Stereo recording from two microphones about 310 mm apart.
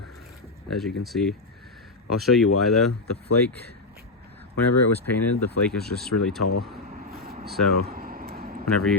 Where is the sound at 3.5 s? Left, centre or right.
Right.